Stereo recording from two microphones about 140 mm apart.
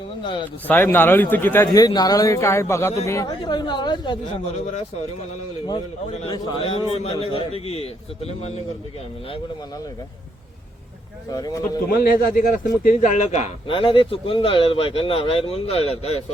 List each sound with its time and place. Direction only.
0.2 s speech: 35° left (ahead or behind)
0.7 s speech: 15° left (ahead or behind); by 4.2 s 35° left (ahead or behind)
6.1 s a man's voice: 50° left (ahead or behind)
6.3 s a man's voice: 40° left (ahead or behind)
11.3 s speech: 25° left (ahead or behind)
11.9 s speech: 90° left; by 13.5 s 60° left (ahead or behind)
13.7 s speech: 40° left (ahead or behind)